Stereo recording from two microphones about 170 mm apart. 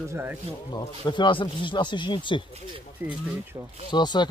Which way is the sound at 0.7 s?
25° left (ahead or behind).